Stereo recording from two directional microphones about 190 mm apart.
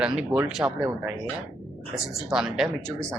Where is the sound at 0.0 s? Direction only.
5° right (ahead or behind).